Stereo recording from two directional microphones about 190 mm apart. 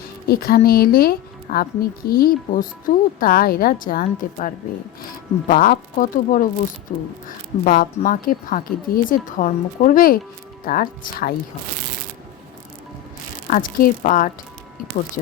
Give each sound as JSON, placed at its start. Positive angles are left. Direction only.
{"t": 0.3, "sound": "speech", "side_deg": 50}
{"t": 13.5, "sound": "speech", "side_deg": 45}